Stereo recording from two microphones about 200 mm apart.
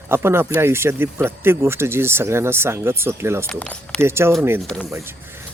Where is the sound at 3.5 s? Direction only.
5° left (ahead or behind).